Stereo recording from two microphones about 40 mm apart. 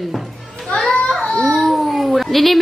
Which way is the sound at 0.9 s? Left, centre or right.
Left.